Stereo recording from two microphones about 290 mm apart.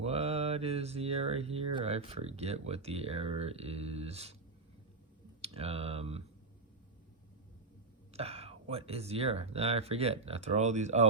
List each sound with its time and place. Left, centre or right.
0.0 s speech: right
5.4 s speech: right
8.1 s speech: right